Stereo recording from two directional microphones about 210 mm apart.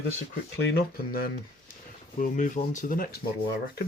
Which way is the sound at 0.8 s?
45° left (ahead or behind).